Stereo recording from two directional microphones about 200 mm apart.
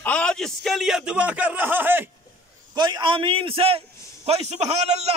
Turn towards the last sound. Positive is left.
turn(degrees=-35)  # may be behind; listen again after turning